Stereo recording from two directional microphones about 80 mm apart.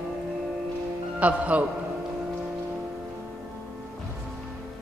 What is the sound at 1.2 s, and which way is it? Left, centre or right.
Speech, centre.